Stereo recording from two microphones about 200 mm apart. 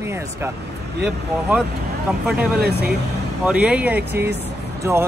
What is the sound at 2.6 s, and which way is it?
Speech, 55° right (ahead or behind).